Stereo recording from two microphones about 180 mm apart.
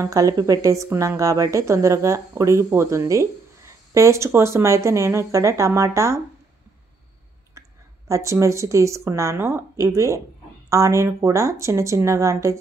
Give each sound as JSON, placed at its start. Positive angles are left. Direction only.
{"t": 0.0, "sound": "a woman's voice", "side_deg": -20}
{"t": 8.1, "sound": "a woman's voice", "side_deg": -15}